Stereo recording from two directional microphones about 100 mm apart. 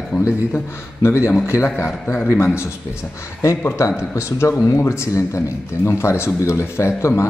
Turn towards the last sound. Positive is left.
turn(degrees=25)  # may be behind; listen again after turning